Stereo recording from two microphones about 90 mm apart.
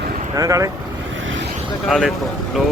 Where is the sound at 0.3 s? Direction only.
40° right (ahead or behind).